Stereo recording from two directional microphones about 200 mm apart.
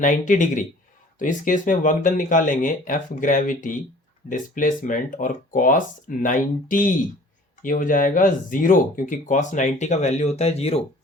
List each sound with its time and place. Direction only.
0.0 s speech: 40° left (ahead or behind)